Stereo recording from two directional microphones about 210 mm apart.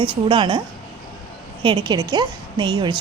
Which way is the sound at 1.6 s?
20° right (ahead or behind).